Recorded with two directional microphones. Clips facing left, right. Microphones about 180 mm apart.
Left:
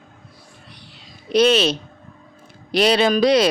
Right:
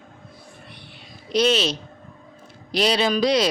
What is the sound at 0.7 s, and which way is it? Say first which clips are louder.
Whispering: right 1 dB; 55° right (ahead or behind).